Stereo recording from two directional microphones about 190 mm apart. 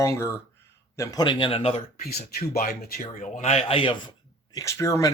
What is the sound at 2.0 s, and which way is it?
Speech, 55° left (ahead or behind).